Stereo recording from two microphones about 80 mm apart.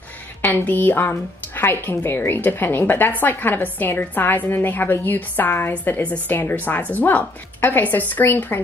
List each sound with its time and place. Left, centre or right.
0.4 s speech: left